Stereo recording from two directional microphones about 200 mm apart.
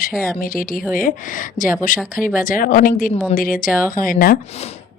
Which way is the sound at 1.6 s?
40° left (ahead or behind).